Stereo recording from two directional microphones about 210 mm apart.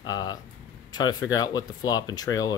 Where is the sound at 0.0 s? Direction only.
20° left (ahead or behind).